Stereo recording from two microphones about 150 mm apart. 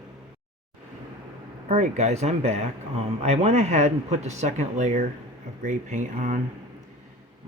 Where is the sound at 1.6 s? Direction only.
50° right (ahead or behind).